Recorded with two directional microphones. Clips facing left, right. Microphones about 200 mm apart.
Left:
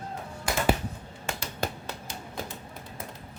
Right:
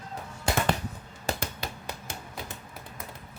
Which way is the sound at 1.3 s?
35° right (ahead or behind).